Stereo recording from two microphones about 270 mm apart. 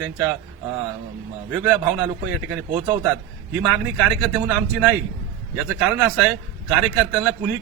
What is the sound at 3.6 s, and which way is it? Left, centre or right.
A man's voice, centre.